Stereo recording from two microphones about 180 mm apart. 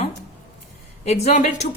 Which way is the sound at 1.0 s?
35° left (ahead or behind).